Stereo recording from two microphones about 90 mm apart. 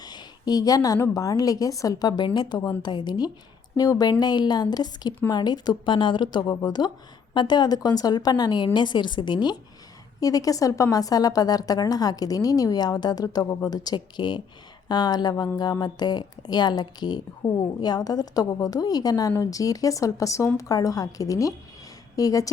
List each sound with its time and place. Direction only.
0.0 s a sound: 50° left (ahead or behind)
1.1 s a woman's voice: 40° left (ahead or behind); by 6.4 s 65° left (ahead or behind)
6.7 s a woman's voice: 50° left (ahead or behind)
10.2 s a woman's voice: 40° left (ahead or behind)